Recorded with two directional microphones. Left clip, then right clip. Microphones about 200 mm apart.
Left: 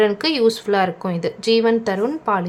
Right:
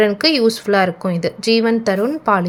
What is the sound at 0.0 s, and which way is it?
A woman's voice, 15° right (ahead or behind).